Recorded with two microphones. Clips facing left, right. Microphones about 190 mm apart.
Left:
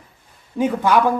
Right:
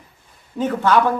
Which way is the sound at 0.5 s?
10° left (ahead or behind).